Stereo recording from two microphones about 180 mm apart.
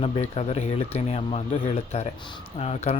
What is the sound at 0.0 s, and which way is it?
Speech, 35° left (ahead or behind).